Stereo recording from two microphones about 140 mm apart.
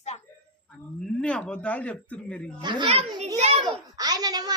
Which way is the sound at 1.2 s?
5° left (ahead or behind).